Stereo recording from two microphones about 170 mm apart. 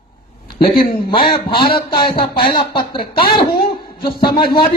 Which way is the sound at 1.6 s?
60° left (ahead or behind).